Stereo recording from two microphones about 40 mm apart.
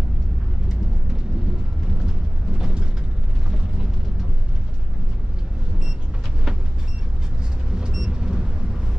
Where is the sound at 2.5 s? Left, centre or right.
Centre.